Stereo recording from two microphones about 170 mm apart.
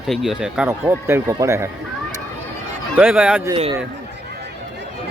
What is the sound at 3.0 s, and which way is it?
Speech, 5° right (ahead or behind).